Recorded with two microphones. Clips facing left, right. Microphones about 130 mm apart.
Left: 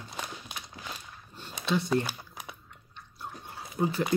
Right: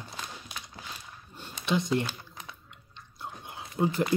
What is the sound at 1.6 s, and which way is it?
Speech, 15° right (ahead or behind).